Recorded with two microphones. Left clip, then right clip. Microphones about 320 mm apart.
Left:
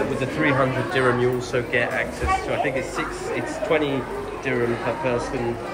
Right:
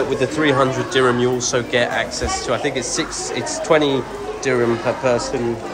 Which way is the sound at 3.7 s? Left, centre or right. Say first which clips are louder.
Right 7 dB; right.